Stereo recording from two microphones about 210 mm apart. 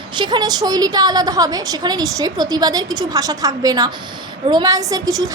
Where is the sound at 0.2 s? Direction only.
20° right (ahead or behind).